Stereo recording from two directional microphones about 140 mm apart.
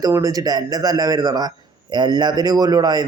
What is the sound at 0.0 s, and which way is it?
A man's voice, 25° right (ahead or behind).